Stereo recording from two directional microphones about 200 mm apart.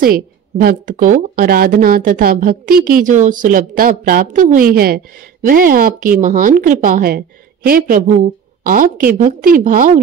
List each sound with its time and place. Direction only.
0.0 s a woman's voice: 50° right (ahead or behind)